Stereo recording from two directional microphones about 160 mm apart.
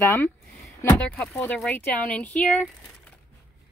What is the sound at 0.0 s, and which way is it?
Speech, 15° left (ahead or behind).